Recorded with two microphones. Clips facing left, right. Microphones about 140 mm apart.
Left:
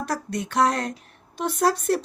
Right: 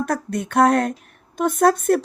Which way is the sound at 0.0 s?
55° right (ahead or behind).